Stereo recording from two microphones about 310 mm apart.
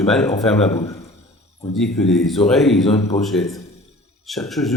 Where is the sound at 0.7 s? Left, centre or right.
Centre.